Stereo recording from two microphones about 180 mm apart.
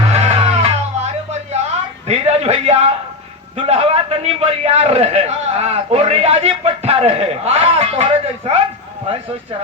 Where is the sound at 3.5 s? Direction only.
35° right (ahead or behind).